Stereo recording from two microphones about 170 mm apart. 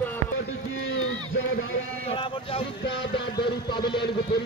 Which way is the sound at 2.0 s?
30° left (ahead or behind).